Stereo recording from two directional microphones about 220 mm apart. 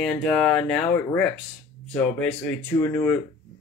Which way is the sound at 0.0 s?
5° left (ahead or behind).